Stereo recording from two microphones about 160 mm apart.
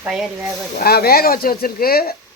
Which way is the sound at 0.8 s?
75° left (ahead or behind).